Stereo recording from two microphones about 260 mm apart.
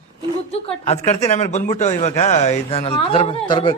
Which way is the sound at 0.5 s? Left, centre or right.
Left.